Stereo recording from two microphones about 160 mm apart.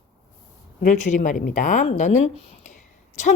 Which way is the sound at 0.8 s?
50° left (ahead or behind).